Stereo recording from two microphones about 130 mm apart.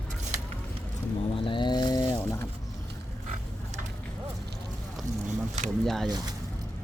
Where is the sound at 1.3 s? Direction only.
40° left (ahead or behind).